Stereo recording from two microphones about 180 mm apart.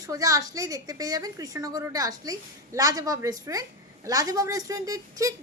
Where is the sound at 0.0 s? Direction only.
20° right (ahead or behind).